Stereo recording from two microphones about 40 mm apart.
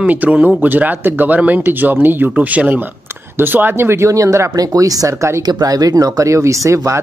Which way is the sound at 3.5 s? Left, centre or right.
Right.